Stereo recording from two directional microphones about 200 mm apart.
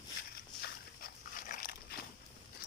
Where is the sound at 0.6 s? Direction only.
45° left (ahead or behind).